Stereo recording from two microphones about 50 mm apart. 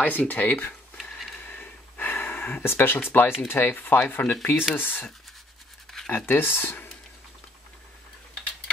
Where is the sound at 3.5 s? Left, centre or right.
Left.